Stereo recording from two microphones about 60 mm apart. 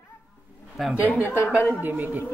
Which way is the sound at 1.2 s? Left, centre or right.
Left.